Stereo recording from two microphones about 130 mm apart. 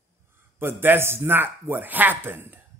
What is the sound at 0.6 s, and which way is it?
Speech, 15° right (ahead or behind).